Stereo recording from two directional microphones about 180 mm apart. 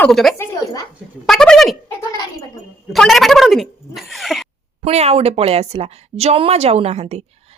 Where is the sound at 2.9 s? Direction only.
Centre (ahead or behind).